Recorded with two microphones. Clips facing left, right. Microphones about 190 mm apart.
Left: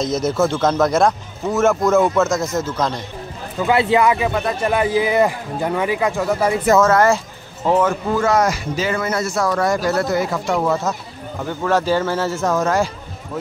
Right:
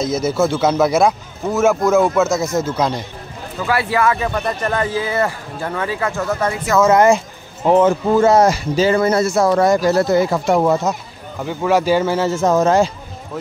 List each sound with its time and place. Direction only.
0.0 s a man's voice: 5° right (ahead or behind)
3.6 s a man's voice: 20° left (ahead or behind)
4.4 s a man's voice: centre (ahead or behind)
4.6 s a man's voice: 15° left (ahead or behind)
6.8 s speech: 15° right (ahead or behind)